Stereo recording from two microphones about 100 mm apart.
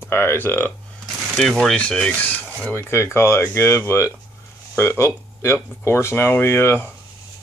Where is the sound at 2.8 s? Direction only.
25° left (ahead or behind).